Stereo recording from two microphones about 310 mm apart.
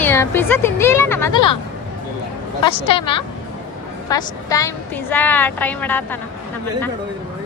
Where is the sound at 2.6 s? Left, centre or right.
Centre.